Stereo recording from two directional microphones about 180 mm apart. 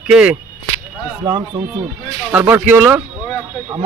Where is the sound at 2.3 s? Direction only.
10° right (ahead or behind).